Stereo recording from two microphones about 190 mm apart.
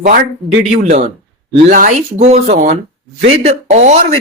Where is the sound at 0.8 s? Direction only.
40° right (ahead or behind).